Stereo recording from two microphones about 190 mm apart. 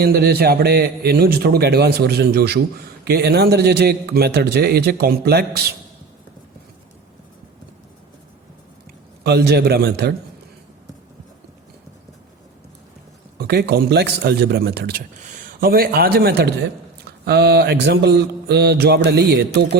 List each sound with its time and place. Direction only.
0.0 s a man's voice: 55° right (ahead or behind)
9.2 s a man's voice: 60° right (ahead or behind)
13.5 s a man's voice: 60° right (ahead or behind)
15.2 s a man's voice: 40° right (ahead or behind); by 19.8 s 60° right (ahead or behind)